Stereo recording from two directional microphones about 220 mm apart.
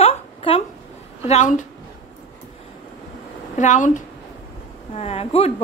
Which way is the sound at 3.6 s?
35° left (ahead or behind).